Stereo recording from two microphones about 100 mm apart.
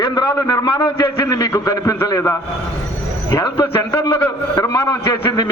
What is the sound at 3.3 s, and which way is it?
Speech, 50° left (ahead or behind).